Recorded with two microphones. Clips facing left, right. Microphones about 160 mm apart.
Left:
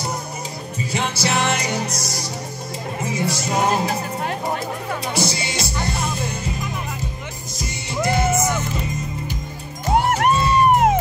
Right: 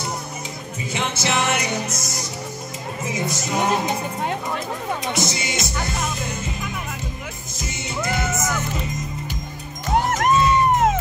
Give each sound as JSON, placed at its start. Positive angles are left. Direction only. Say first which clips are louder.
{"t": 0.9, "sound": "music", "louder": "left 1 dB", "side_deg": 35}
{"t": 3.3, "sound": "music", "louder": "left 1 dB", "side_deg": 35}
{"t": 5.1, "sound": "music", "louder": "left 1 dB", "side_deg": 30}
{"t": 7.5, "sound": "music", "louder": "left 2 dB", "side_deg": 30}
{"t": 9.8, "sound": "music", "louder": "left 2 dB", "side_deg": 30}